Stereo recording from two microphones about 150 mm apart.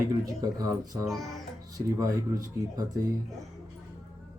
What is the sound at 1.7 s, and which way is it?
Speech, 20° right (ahead or behind).